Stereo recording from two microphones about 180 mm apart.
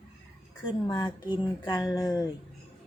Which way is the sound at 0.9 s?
25° left (ahead or behind).